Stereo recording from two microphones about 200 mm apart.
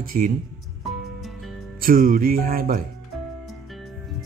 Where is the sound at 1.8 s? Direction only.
45° right (ahead or behind).